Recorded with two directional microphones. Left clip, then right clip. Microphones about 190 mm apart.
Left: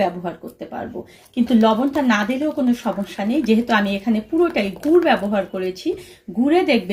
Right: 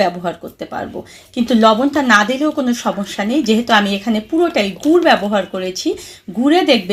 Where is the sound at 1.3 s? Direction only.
25° right (ahead or behind).